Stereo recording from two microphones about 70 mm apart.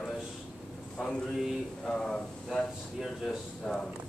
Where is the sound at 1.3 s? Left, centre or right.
Centre.